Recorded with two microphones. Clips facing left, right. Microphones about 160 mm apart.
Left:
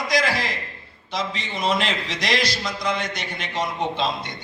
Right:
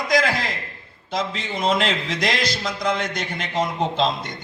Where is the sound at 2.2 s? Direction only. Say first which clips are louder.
Left 1 dB; 50° right (ahead or behind).